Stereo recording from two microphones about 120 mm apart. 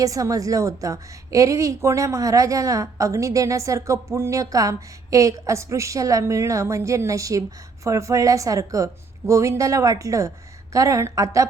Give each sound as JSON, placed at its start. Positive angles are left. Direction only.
{"t": 0.0, "sound": "a woman's voice", "side_deg": -30}